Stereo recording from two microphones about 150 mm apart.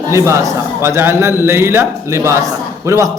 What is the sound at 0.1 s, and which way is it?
A man's voice, 20° right (ahead or behind).